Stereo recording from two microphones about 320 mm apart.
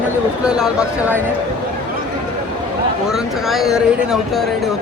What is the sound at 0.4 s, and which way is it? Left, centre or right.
Speech, centre.